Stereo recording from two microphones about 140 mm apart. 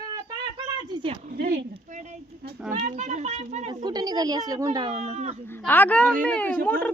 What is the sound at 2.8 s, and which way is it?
Speech, 60° right (ahead or behind).